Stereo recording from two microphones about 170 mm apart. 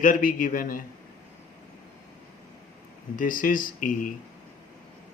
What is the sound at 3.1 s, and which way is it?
Speech, 55° left (ahead or behind).